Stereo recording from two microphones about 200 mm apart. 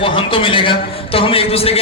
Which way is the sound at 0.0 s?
25° left (ahead or behind).